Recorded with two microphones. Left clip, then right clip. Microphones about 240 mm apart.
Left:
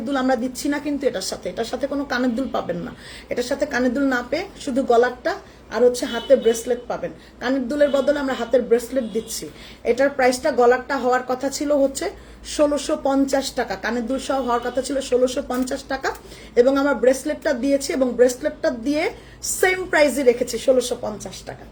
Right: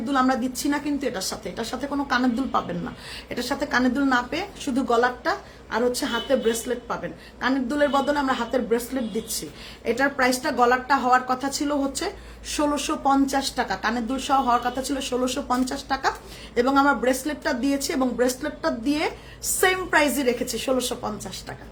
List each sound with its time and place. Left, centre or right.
0.0 s speech: centre